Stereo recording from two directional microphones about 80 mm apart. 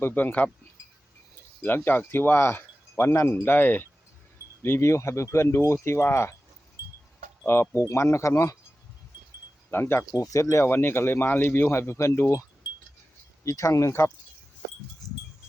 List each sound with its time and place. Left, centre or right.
0.0 s speech: left
1.6 s speech: left
7.4 s speech: left
9.6 s chime: left
10.3 s speech: left